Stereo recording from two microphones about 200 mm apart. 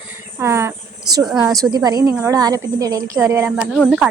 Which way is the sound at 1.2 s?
Centre (ahead or behind).